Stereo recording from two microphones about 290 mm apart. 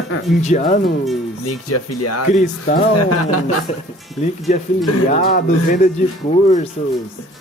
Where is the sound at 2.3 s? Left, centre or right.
Left.